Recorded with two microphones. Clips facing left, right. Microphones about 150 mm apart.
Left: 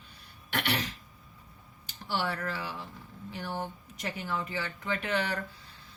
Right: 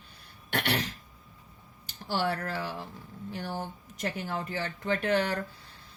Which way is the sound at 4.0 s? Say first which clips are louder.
Right 2 dB; 45° right (ahead or behind).